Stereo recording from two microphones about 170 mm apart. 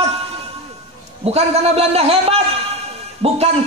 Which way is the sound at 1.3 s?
35° right (ahead or behind).